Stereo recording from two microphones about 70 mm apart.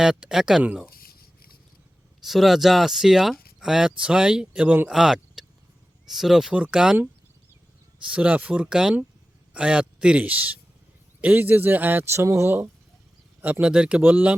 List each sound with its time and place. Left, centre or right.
0.0 s a man's voice: centre
2.2 s speech: centre
6.5 s a man's voice: centre
8.0 s a man's voice: centre; by 12.5 s right
13.4 s a man's voice: right
14.0 s speech: right